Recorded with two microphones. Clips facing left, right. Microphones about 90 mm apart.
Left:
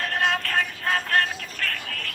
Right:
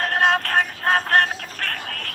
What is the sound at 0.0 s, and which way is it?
Vehicle, 45° right (ahead or behind).